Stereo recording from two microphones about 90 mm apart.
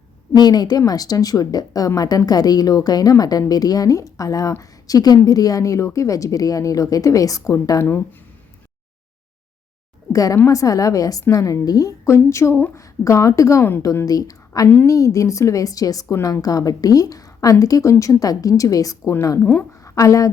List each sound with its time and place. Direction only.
0.3 s a woman's voice: 50° left (ahead or behind); by 8.0 s 30° left (ahead or behind)
10.1 s a woman's voice: 40° left (ahead or behind)
19.4 s a woman's voice: 20° left (ahead or behind)
19.8 s a woman's voice: 35° left (ahead or behind)